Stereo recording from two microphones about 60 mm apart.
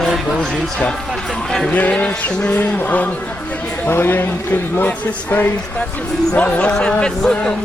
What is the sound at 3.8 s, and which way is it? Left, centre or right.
Speech, left.